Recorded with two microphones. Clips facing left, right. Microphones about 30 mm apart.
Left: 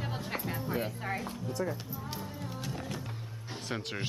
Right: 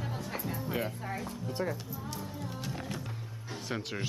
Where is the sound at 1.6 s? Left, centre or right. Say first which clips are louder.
Even; right.